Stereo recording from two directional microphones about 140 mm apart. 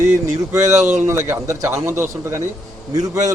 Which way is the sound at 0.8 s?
60° right (ahead or behind).